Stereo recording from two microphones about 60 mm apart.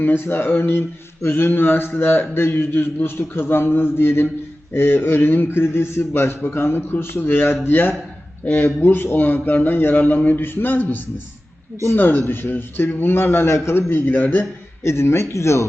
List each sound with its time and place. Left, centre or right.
0.0 s speech: left
14.8 s speech: left